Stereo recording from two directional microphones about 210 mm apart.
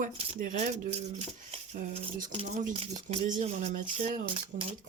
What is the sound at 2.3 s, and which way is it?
Speech, 35° right (ahead or behind).